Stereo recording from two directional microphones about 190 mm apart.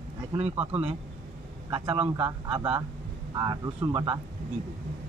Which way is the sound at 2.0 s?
25° right (ahead or behind).